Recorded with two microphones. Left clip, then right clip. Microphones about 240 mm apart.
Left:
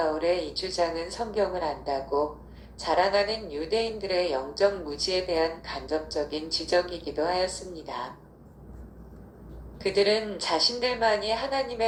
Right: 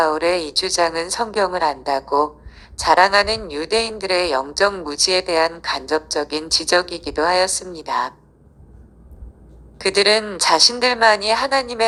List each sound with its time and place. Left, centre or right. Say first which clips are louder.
0.0 s a woman's voice: right 8 dB; right
9.7 s a woman's voice: right 8 dB; right